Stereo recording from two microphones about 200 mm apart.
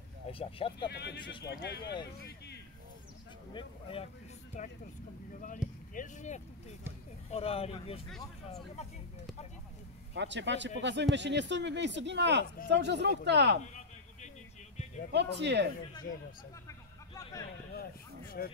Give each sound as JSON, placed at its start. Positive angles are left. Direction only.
{"t": 0.3, "sound": "speech", "side_deg": 25}
{"t": 0.8, "sound": "speech", "side_deg": 55}
{"t": 3.5, "sound": "speech", "side_deg": 30}
{"t": 5.6, "sound": "boat", "side_deg": -5}
{"t": 5.9, "sound": "speech", "side_deg": 35}
{"t": 10.1, "sound": "speech", "side_deg": -60}
{"t": 15.1, "sound": "speech", "side_deg": -60}
{"t": 16.6, "sound": "hubbub", "side_deg": 15}
{"t": 18.4, "sound": "speech", "side_deg": 50}